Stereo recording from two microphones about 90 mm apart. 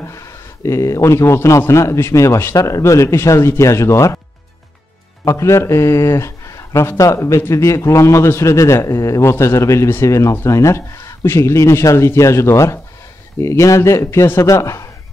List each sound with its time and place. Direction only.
0.0 s speech: 35° left (ahead or behind)
5.2 s speech: 30° left (ahead or behind)